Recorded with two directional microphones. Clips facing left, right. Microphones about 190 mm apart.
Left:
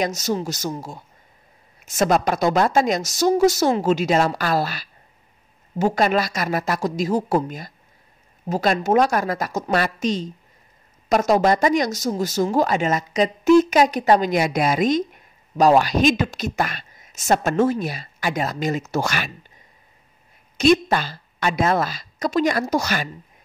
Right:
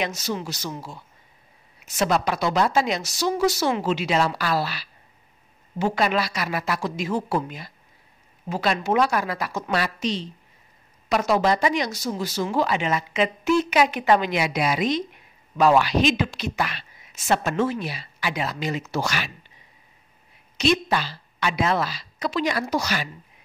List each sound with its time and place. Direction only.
0.0 s speech: 40° left (ahead or behind)
20.5 s speech: 50° left (ahead or behind)